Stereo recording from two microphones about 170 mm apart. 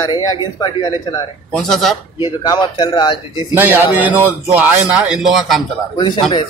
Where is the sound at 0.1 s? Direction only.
25° left (ahead or behind).